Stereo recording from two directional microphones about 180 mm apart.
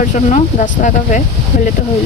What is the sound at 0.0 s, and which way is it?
Speech, 45° left (ahead or behind).